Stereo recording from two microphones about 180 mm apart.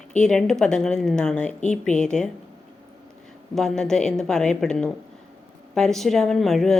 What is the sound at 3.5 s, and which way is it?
A woman's voice, 5° left (ahead or behind).